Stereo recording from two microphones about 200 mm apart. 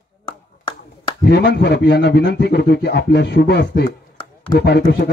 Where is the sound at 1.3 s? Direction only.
55° left (ahead or behind).